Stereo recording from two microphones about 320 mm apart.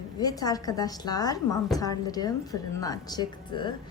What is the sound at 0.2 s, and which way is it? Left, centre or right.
A woman's voice, centre.